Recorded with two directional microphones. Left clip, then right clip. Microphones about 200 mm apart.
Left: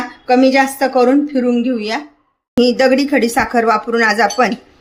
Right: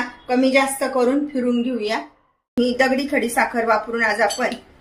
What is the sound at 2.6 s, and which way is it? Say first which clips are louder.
A woman's voice: left 7 dB; 50° left (ahead or behind).